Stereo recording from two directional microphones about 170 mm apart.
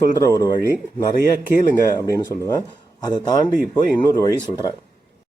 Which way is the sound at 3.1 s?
25° left (ahead or behind).